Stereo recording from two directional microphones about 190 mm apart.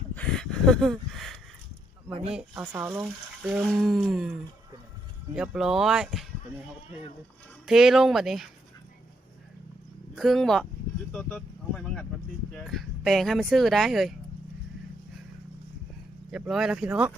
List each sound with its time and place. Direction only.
0.1 s a sound: 5° left (ahead or behind)
2.0 s speech: 30° right (ahead or behind)
2.7 s speech: 10° right (ahead or behind)
7.7 s speech: centre (ahead or behind)
10.2 s speech: centre (ahead or behind)
16.3 s speech: centre (ahead or behind)